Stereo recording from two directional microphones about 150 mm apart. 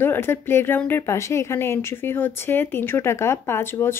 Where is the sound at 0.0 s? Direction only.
15° left (ahead or behind).